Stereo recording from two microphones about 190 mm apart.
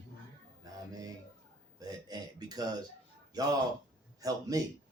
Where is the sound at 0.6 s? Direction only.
20° right (ahead or behind).